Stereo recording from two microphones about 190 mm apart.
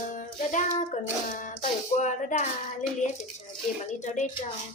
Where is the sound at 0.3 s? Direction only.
40° left (ahead or behind).